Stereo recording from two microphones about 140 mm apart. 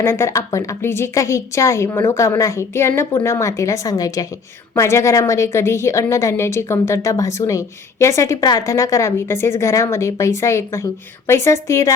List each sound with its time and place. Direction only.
0.0 s a woman's voice: 20° left (ahead or behind)